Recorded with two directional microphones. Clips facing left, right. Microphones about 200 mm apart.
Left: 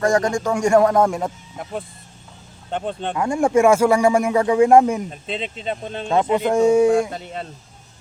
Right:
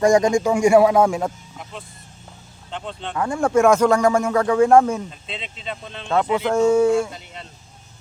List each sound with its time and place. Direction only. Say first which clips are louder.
0.0 s speech: right 3 dB; 15° right (ahead or behind)
2.6 s speech: left 6 dB; 50° left (ahead or behind)
3.2 s speech: left 1 dB; 15° left (ahead or behind)
5.2 s speech: left 6 dB; 50° left (ahead or behind)
6.3 s speech: left 1 dB; 15° left (ahead or behind)